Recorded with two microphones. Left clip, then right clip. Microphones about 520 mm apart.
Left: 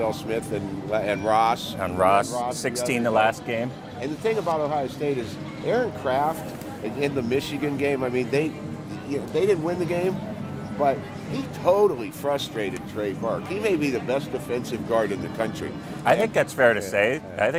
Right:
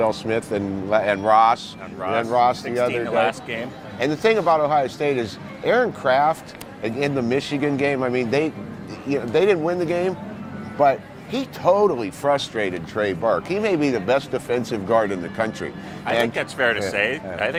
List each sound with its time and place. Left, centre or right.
0.0 s speech: right
1.8 s speech: left
2.3 s speech: right
2.9 s speech: left
4.0 s speech: right
16.0 s speech: left